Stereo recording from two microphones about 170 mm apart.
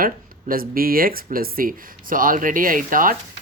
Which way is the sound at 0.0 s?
55° right (ahead or behind).